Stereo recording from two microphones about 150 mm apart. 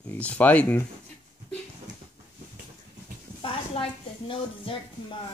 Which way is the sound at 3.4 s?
35° left (ahead or behind).